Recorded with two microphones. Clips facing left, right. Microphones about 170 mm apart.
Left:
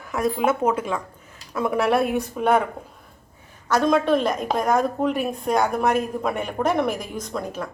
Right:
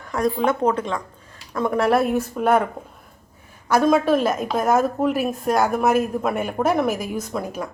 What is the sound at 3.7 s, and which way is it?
A woman's voice, 5° right (ahead or behind).